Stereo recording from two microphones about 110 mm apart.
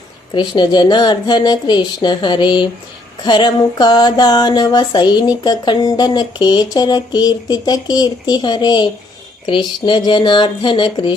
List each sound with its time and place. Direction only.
0.3 s speech: 45° left (ahead or behind)
3.2 s a sound: 45° left (ahead or behind)
9.5 s speech: 45° left (ahead or behind)